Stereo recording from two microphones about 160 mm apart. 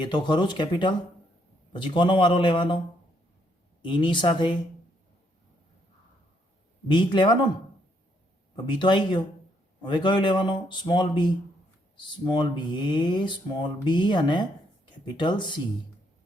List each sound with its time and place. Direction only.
0.0 s a man's voice: 30° left (ahead or behind)
3.8 s speech: 30° left (ahead or behind)
6.8 s speech: 30° left (ahead or behind)
8.5 s speech: 30° left (ahead or behind)